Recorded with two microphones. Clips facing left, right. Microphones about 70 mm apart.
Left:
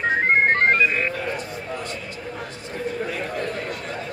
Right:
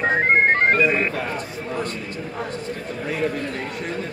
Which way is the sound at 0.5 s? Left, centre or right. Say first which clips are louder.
Right 1 dB; centre.